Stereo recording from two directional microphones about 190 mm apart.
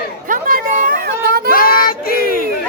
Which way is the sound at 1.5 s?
50° left (ahead or behind).